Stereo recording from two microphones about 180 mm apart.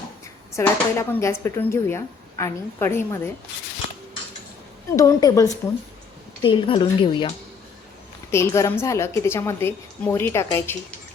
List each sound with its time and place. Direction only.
0.5 s a woman's voice: 15° left (ahead or behind)
4.9 s a woman's voice: 15° left (ahead or behind)
6.4 s a woman's voice: 30° left (ahead or behind)
8.3 s a woman's voice: 15° left (ahead or behind)